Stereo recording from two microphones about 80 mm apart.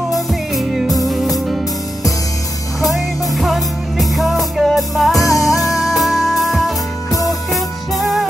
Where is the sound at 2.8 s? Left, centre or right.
Centre.